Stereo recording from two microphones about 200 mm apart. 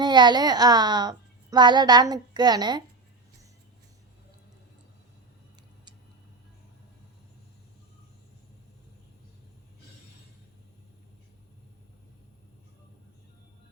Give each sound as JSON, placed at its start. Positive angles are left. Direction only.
{"t": 0.0, "sound": "a child's voice", "side_deg": -20}